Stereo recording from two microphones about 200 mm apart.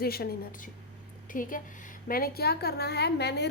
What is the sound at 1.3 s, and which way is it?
A woman's voice, 40° left (ahead or behind).